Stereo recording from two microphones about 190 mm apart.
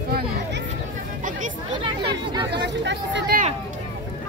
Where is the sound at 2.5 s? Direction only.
65° right (ahead or behind).